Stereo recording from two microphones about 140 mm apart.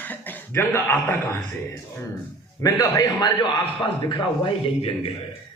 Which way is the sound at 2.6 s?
25° left (ahead or behind).